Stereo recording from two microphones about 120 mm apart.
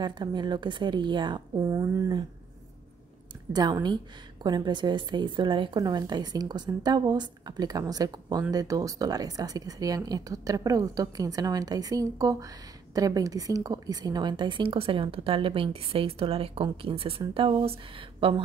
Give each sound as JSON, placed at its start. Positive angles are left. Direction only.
{"t": 0.0, "sound": "a woman's voice", "side_deg": -40}
{"t": 1.7, "sound": "speech", "side_deg": -25}
{"t": 3.5, "sound": "a woman's voice", "side_deg": -35}